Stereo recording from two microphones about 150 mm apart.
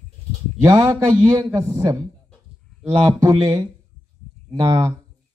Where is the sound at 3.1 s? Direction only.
25° right (ahead or behind).